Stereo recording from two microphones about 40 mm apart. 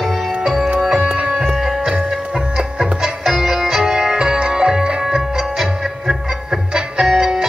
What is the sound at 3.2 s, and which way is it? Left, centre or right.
Music, centre.